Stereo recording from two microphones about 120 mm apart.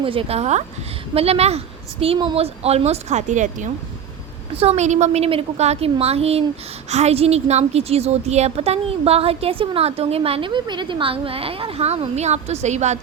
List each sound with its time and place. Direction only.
0.0 s a woman's voice: 50° right (ahead or behind); by 3.7 s 90° right
4.5 s a woman's voice: 55° right (ahead or behind); by 13.0 s 70° right (ahead or behind)